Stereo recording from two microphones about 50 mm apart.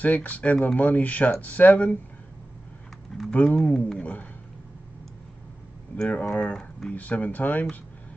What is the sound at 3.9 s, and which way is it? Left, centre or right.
Speech, left.